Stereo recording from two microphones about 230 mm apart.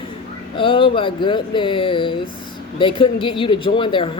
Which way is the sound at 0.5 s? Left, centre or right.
Left.